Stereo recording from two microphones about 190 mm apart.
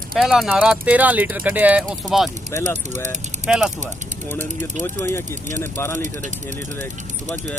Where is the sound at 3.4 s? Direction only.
5° right (ahead or behind).